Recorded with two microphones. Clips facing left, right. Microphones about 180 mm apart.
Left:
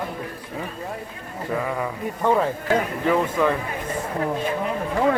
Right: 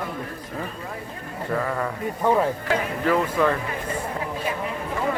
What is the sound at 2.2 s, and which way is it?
Speech, 10° right (ahead or behind).